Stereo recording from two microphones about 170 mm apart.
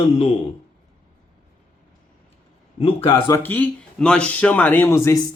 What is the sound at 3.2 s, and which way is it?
Speech, 15° left (ahead or behind).